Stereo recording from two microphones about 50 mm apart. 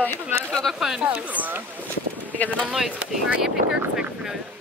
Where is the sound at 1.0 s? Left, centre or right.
Right.